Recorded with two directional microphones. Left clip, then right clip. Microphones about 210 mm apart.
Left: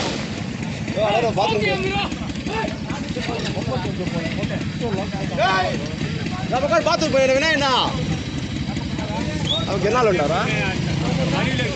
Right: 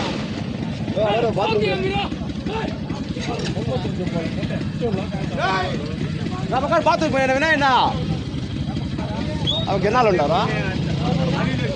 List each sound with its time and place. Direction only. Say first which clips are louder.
1.1 s speech: left 1 dB; 40° right (ahead or behind)
5.4 s speech: left 3 dB; 55° right (ahead or behind)
6.5 s speech: even; 40° right (ahead or behind)
9.8 s speech: right 1 dB; 55° right (ahead or behind)